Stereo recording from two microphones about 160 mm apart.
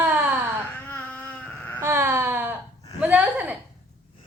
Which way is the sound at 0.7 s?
10° left (ahead or behind).